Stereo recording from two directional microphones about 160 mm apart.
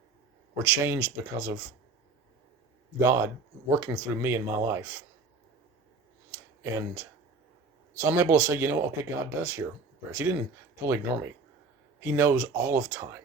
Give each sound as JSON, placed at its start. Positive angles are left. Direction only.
{"t": 0.5, "sound": "speech", "side_deg": -15}
{"t": 3.0, "sound": "speech", "side_deg": -15}
{"t": 6.6, "sound": "speech", "side_deg": -15}